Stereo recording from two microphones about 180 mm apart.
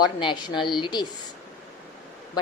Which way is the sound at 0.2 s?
25° left (ahead or behind).